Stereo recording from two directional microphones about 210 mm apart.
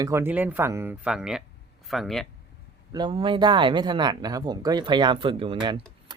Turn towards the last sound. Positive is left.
turn(degrees=-25)  # may be behind; listen again after turning